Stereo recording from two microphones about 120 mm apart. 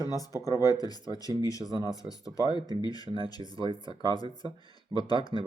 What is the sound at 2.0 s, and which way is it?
Speech, 30° left (ahead or behind).